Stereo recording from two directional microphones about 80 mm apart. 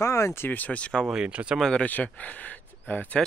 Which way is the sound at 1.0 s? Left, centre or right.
Centre.